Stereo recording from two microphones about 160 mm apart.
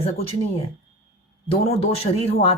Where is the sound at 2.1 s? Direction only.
40° left (ahead or behind).